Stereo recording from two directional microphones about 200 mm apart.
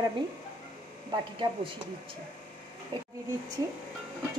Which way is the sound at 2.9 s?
25° right (ahead or behind).